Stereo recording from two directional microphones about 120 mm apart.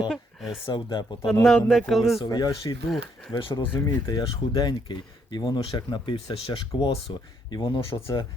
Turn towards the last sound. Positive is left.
turn(degrees=35)  # may be behind; listen again after turning